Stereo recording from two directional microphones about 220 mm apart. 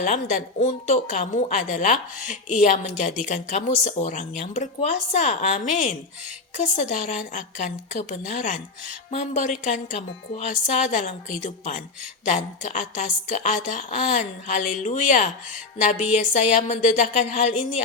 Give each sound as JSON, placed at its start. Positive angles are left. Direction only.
{"t": 0.0, "sound": "a woman's voice", "side_deg": 35}